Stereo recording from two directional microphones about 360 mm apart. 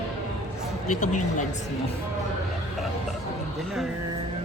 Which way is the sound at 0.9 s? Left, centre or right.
Left.